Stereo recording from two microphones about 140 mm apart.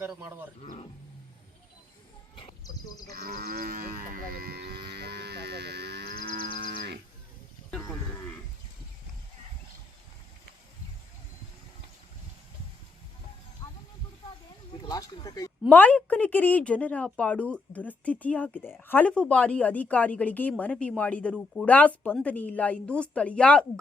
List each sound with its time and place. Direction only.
0.6 s speech: 55° left (ahead or behind)
3.2 s livestock: 90° right
6.1 s livestock: 90° right
14.8 s a sound: 25° left (ahead or behind)
15.7 s a woman's voice: 10° left (ahead or behind)